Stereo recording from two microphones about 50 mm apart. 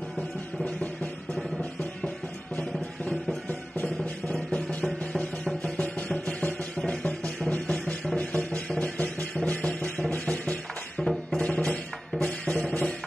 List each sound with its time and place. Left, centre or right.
3.8 s music: left
4.8 s music: centre
5.6 s music: left
6.8 s music: centre
7.1 s music: left